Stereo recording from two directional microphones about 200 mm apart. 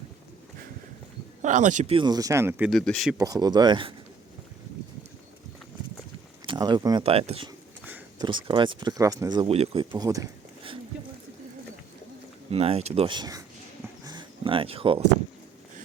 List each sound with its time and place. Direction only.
1.4 s speech: 35° right (ahead or behind); by 2.6 s 10° right (ahead or behind)
2.6 s speech: centre (ahead or behind)
3.2 s speech: 20° right (ahead or behind)
6.4 s speech: 25° right (ahead or behind)
12.5 s speech: 30° right (ahead or behind)
14.0 s a sound: 20° right (ahead or behind)